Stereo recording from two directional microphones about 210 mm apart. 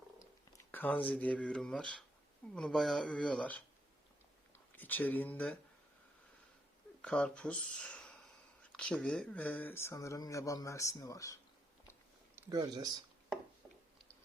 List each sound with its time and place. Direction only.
0.5 s a sound: 10° left (ahead or behind)
1.1 s speech: 5° left (ahead or behind)
4.8 s speech: 10° left (ahead or behind)
7.0 s speech: 5° left (ahead or behind)
12.4 s speech: 15° right (ahead or behind)